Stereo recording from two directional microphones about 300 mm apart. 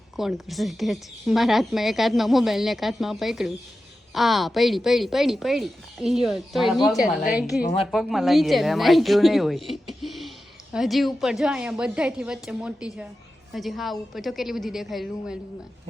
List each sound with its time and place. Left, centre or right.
0.2 s speech: centre
7.6 s a woman's voice: left
7.9 s speech: centre